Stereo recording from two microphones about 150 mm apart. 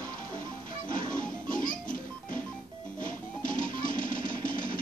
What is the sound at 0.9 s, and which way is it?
Music, 60° left (ahead or behind).